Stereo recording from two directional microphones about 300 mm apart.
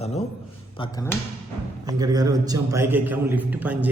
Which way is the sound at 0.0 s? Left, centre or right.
Left.